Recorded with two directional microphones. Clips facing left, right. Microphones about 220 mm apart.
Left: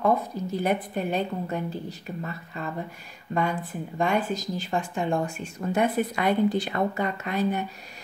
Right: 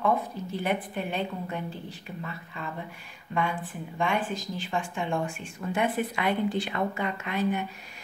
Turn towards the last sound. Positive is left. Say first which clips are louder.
# left 2 dB
turn(degrees=40)  # may be behind; listen again after turning